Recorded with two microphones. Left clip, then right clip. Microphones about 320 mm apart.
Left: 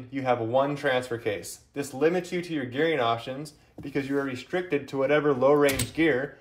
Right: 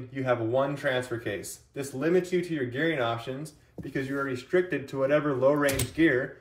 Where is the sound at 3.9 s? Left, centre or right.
Centre.